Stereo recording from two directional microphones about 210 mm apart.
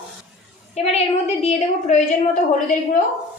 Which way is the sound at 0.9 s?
30° left (ahead or behind).